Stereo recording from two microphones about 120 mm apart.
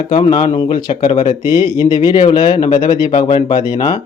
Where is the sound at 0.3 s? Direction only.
35° left (ahead or behind).